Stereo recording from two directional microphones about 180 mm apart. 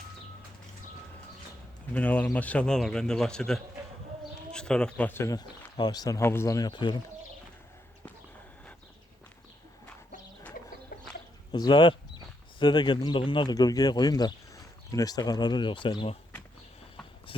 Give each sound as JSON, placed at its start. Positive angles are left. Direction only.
{"t": 1.9, "sound": "a man's voice", "side_deg": 10}
{"t": 11.5, "sound": "speech", "side_deg": 25}